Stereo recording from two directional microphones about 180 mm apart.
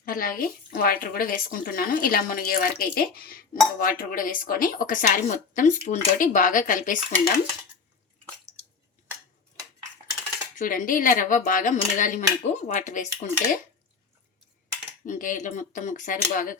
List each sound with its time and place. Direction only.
0.0 s speech: 50° left (ahead or behind)
10.6 s speech: 50° left (ahead or behind)
15.0 s speech: 45° left (ahead or behind)